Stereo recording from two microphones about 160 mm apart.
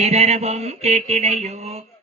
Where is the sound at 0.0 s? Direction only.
45° right (ahead or behind).